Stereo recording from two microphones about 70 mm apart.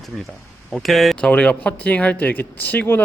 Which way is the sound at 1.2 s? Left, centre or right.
Centre.